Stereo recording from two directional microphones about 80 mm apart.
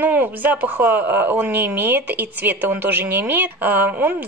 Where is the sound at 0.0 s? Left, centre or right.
Right.